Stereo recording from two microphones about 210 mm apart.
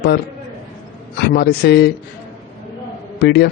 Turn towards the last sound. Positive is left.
turn(degrees=50)  # may be behind; listen again after turning